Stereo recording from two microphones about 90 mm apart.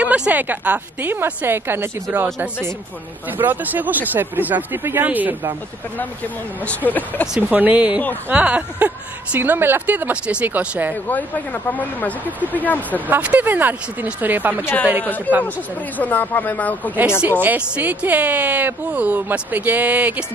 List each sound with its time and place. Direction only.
0.0 s speech: 15° right (ahead or behind)
3.3 s speech: 20° right (ahead or behind)
5.9 s speech: 15° left (ahead or behind)
7.3 s speech: 20° right (ahead or behind)
11.1 s speech: 20° left (ahead or behind)
13.1 s speech: 15° right (ahead or behind)
14.6 s speech: 25° left (ahead or behind)
17.3 s speech: 20° right (ahead or behind)